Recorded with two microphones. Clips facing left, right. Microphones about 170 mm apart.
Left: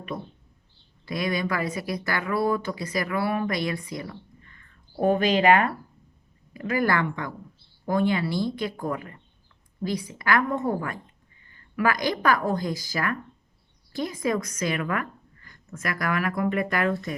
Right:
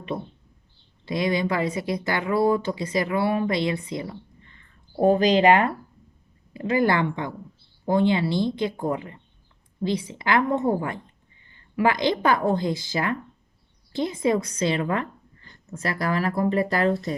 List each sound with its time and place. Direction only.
1.0 s a woman's voice: 25° right (ahead or behind)